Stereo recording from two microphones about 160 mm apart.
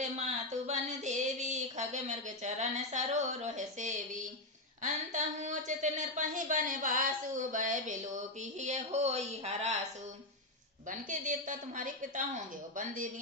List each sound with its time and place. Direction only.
0.0 s speech: 45° right (ahead or behind)
10.8 s speech: 50° right (ahead or behind)